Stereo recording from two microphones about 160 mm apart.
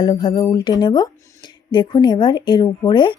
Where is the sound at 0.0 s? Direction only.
30° left (ahead or behind).